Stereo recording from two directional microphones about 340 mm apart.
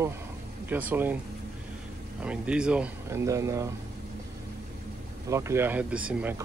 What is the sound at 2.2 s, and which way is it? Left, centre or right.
Speech, centre.